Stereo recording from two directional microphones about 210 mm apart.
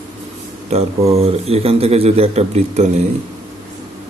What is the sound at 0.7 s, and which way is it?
Speech, 30° right (ahead or behind).